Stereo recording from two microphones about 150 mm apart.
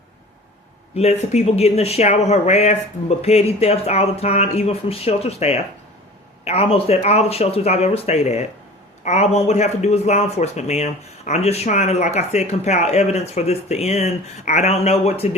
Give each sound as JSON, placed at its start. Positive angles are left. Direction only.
{"t": 0.9, "sound": "speech", "side_deg": 45}